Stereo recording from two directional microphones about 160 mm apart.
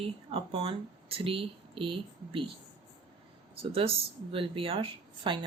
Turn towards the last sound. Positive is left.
turn(degrees=-30)  # may be behind; listen again after turning